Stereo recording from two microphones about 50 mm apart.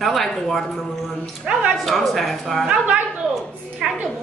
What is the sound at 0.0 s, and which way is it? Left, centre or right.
Speech, centre.